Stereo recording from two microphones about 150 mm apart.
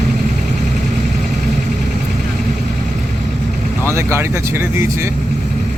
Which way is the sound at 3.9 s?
20° right (ahead or behind).